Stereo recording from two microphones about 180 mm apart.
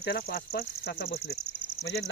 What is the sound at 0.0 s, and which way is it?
Speech, 60° left (ahead or behind).